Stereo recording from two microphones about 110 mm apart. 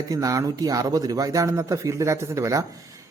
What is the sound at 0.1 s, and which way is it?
Speech, 30° right (ahead or behind).